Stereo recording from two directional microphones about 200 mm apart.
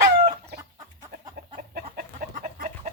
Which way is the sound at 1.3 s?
50° right (ahead or behind).